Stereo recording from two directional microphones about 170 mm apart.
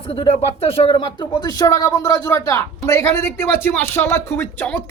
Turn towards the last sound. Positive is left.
turn(degrees=15)  # may be behind; listen again after turning